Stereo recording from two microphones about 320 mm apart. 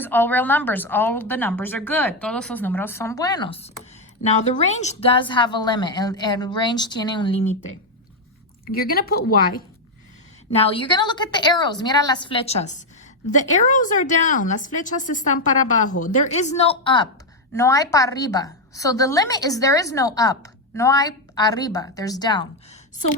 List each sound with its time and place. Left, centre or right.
0.0 s a woman's voice: centre
8.6 s a woman's voice: left
10.5 s a woman's voice: centre